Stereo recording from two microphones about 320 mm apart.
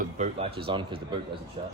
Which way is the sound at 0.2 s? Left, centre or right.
Centre.